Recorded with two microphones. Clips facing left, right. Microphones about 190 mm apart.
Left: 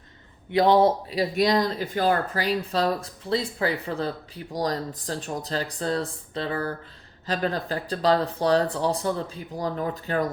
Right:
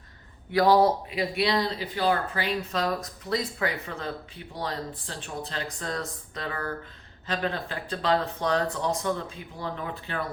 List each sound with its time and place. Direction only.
0.5 s a man's voice: 25° left (ahead or behind)
1.1 s speech: 45° left (ahead or behind)